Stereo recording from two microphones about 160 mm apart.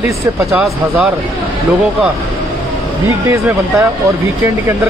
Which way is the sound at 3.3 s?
20° right (ahead or behind).